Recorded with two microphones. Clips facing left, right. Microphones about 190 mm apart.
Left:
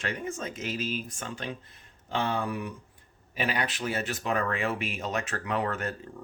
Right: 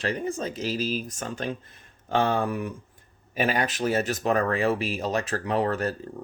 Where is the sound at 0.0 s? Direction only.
35° right (ahead or behind).